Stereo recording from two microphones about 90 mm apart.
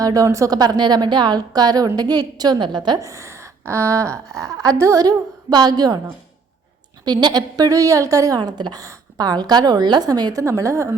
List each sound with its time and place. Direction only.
0.0 s a woman's voice: 40° right (ahead or behind); by 3.0 s 55° right (ahead or behind)
3.0 s a woman's voice: 35° right (ahead or behind)
7.0 s a woman's voice: 50° right (ahead or behind)
8.4 s a woman's voice: 55° right (ahead or behind)
10.4 s a woman's voice: 35° right (ahead or behind)